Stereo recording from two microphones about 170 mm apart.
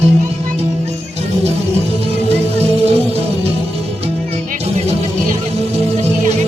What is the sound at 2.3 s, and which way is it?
Music, 35° right (ahead or behind).